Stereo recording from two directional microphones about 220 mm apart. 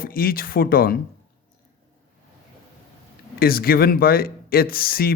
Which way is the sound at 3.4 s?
45° left (ahead or behind).